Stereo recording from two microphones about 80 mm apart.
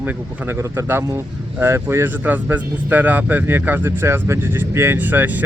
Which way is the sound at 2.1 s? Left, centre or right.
Right.